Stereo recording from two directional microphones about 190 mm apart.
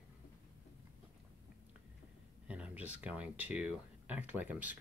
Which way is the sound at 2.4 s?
5° right (ahead or behind).